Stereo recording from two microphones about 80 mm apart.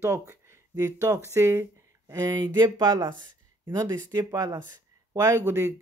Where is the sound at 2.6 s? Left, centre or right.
Right.